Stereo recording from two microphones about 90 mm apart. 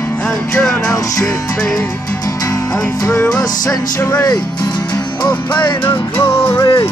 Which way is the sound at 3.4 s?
45° left (ahead or behind).